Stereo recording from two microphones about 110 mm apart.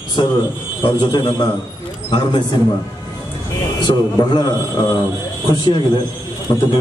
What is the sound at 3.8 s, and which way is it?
A man's voice, 45° left (ahead or behind).